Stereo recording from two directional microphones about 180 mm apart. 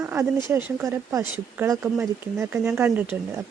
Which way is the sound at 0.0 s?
15° right (ahead or behind).